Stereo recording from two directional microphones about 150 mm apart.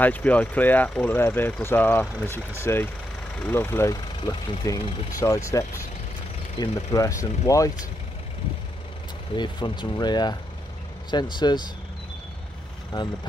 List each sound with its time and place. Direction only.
0.0 s speech: 10° left (ahead or behind)
9.3 s speech: 30° left (ahead or behind)